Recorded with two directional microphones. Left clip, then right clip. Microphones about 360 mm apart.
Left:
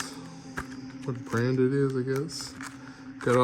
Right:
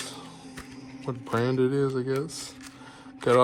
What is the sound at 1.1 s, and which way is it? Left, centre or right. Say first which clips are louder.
Speech: right 2 dB; centre.